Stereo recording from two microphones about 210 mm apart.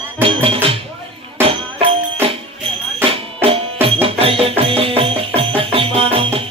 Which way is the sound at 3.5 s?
25° right (ahead or behind).